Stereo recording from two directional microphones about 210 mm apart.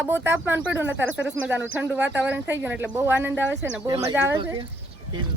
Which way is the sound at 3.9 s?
30° right (ahead or behind).